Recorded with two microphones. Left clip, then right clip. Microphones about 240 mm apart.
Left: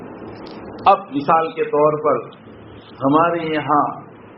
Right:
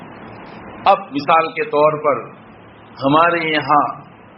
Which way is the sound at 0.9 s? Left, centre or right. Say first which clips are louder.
Even; right.